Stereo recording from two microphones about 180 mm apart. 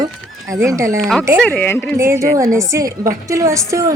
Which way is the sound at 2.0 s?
15° right (ahead or behind).